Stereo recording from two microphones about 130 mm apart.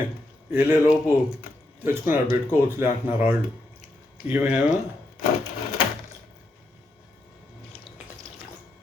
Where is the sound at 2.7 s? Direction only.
15° right (ahead or behind).